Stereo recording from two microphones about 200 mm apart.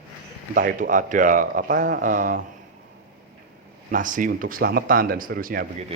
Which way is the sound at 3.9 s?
40° right (ahead or behind).